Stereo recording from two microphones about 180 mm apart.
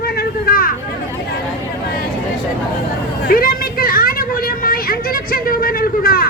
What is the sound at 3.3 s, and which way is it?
Vehicle, 55° left (ahead or behind).